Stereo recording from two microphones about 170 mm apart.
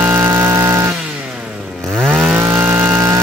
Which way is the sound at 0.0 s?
10° right (ahead or behind).